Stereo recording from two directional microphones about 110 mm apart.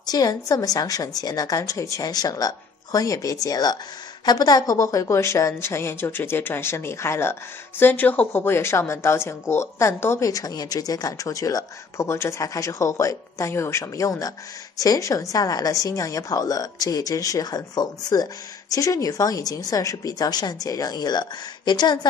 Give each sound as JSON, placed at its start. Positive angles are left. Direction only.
{"t": 0.0, "sound": "a woman's voice", "side_deg": 35}